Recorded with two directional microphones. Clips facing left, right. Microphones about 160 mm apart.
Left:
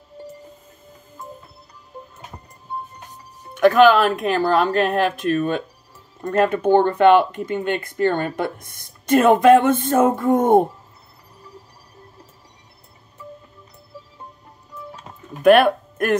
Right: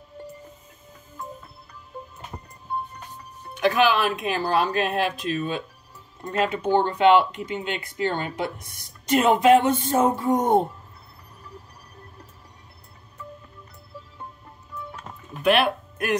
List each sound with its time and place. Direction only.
3.5 s speech: 50° left (ahead or behind)
15.4 s speech: 45° left (ahead or behind)